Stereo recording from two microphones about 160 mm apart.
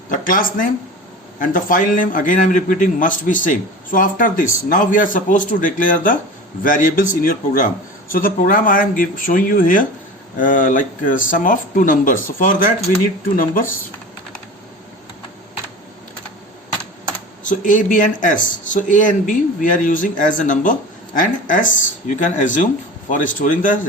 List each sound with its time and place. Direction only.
0.1 s a man's voice: 60° left (ahead or behind)
17.5 s a man's voice: 55° left (ahead or behind)